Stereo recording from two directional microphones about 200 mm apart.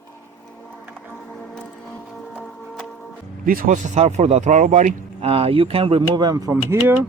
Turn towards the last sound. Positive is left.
turn(degrees=-15)  # may be behind; listen again after turning